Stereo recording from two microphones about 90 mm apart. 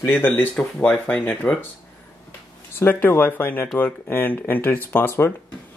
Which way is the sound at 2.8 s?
20° left (ahead or behind).